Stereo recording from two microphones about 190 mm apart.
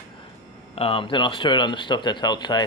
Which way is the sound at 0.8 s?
30° left (ahead or behind).